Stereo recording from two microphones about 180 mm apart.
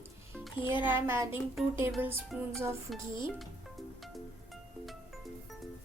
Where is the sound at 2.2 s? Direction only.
Centre (ahead or behind).